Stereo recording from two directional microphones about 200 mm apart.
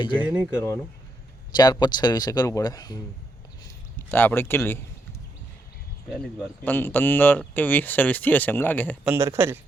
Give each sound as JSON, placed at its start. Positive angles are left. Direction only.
{"t": 0.0, "sound": "speech", "side_deg": 25}
{"t": 1.5, "sound": "speech", "side_deg": 20}
{"t": 6.7, "sound": "speech", "side_deg": 10}
{"t": 9.0, "sound": "speech", "side_deg": -15}